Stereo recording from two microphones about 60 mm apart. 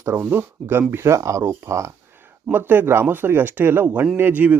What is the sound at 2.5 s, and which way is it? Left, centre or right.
Speech, right.